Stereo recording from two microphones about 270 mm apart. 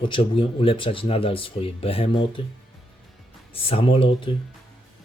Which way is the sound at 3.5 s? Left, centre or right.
Left.